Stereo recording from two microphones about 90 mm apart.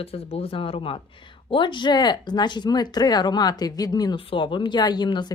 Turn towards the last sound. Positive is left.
turn(degrees=55)  # may be behind; listen again after turning